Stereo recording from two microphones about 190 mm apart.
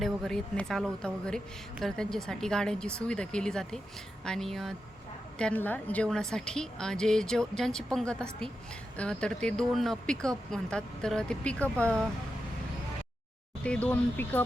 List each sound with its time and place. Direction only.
0.0 s a woman's voice: centre (ahead or behind)
13.6 s speech: 5° left (ahead or behind)